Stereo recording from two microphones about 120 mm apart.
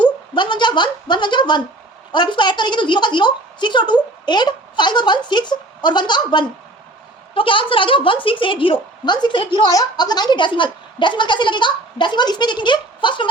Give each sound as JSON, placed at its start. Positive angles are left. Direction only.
{"t": 0.0, "sound": "a woman's voice", "side_deg": 40}